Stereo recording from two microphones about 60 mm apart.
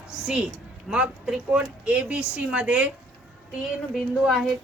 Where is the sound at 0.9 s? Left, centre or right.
Right.